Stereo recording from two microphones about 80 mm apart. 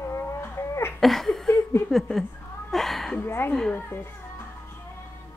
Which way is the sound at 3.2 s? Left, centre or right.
Left.